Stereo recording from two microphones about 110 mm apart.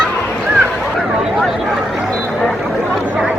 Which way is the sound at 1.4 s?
Centre (ahead or behind).